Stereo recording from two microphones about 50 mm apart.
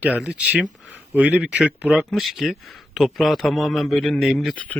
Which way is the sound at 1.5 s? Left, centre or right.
Centre.